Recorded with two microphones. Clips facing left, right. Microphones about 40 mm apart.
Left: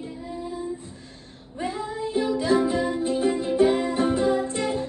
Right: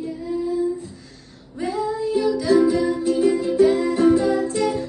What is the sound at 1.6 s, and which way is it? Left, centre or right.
Music, left.